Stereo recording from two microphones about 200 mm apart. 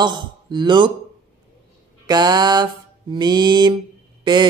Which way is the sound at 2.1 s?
20° right (ahead or behind).